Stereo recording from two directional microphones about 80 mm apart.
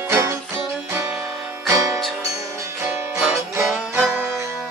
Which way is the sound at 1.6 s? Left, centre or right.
Right.